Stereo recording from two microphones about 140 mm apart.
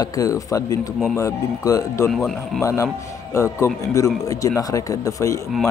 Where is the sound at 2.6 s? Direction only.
20° left (ahead or behind).